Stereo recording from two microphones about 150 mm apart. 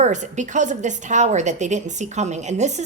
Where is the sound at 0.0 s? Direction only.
55° right (ahead or behind).